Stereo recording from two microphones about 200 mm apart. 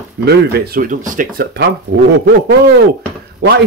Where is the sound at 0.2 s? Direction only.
55° right (ahead or behind).